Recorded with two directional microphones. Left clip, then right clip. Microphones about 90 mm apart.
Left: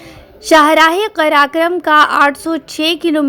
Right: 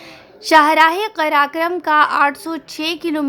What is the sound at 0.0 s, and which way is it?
A woman's voice, 35° left (ahead or behind).